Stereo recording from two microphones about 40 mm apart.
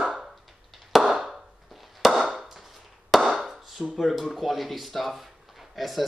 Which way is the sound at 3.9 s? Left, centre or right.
Centre.